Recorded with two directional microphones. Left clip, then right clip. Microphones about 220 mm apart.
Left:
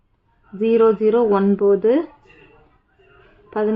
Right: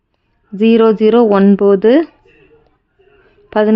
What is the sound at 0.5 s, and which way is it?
Speech, 50° right (ahead or behind).